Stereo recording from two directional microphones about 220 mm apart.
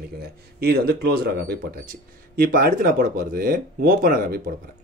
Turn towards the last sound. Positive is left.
turn(degrees=-40)  # may be behind; listen again after turning